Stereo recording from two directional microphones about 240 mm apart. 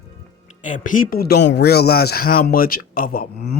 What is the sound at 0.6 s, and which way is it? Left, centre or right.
Speech, left.